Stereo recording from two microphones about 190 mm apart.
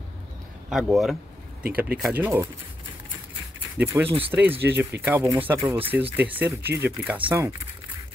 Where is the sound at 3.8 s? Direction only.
10° right (ahead or behind).